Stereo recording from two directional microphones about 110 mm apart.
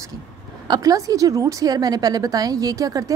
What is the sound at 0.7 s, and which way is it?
A woman's voice, 35° right (ahead or behind).